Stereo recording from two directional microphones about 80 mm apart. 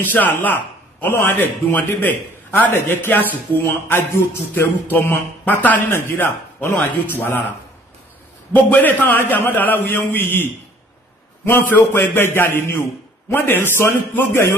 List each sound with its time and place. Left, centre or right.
0.0 s a man's voice: left
8.5 s a man's voice: left